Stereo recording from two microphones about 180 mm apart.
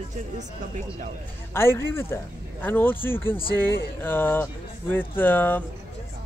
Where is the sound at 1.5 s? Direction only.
15° left (ahead or behind).